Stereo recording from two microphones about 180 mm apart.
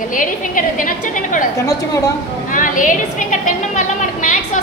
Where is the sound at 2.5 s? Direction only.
45° left (ahead or behind).